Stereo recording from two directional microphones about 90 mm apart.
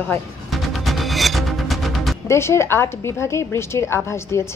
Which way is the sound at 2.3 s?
30° left (ahead or behind).